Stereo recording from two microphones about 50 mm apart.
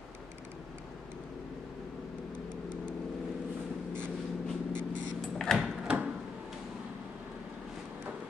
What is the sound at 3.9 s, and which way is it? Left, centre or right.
Vehicle, left.